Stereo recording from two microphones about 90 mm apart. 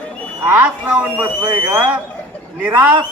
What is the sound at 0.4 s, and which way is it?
Speech, 20° right (ahead or behind).